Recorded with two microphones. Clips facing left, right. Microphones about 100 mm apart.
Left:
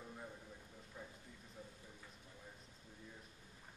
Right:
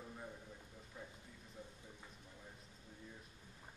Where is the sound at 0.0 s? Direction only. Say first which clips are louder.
Even; centre (ahead or behind).